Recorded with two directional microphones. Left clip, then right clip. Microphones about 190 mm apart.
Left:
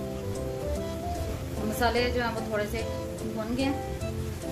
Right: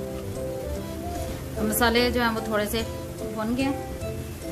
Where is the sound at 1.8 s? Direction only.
35° right (ahead or behind).